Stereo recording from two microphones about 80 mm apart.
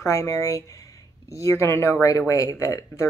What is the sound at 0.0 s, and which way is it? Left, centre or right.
Speech, left.